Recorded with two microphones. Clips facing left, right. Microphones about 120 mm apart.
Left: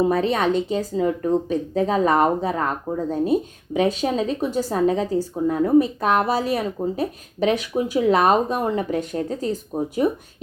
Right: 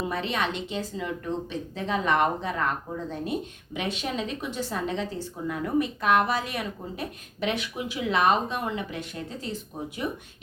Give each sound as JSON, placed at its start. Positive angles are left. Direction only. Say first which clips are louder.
{"t": 0.0, "sound": "speech", "louder": "left 9 dB", "side_deg": 40}